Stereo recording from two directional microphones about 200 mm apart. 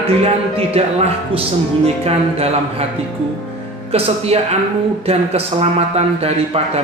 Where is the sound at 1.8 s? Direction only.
30° right (ahead or behind).